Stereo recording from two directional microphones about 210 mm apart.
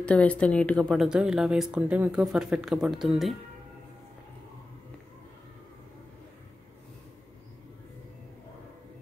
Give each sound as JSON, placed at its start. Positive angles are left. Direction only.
{"t": 0.0, "sound": "speech", "side_deg": 5}